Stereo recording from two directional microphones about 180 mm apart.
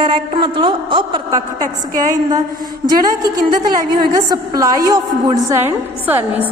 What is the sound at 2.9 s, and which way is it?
A woman's voice, 20° right (ahead or behind).